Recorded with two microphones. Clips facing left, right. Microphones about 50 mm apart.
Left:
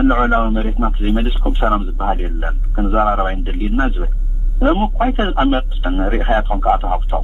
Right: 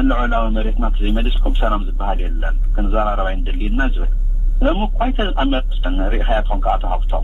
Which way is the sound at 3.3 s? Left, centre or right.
Centre.